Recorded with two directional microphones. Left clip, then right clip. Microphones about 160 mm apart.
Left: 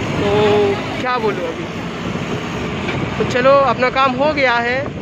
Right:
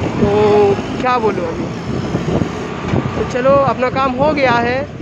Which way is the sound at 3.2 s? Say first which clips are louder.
Left 1 dB; 10° right (ahead or behind).